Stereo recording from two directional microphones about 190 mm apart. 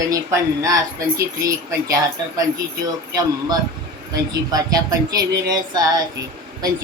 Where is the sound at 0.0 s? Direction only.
15° right (ahead or behind).